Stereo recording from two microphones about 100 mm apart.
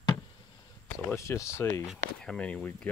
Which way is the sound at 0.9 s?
30° left (ahead or behind).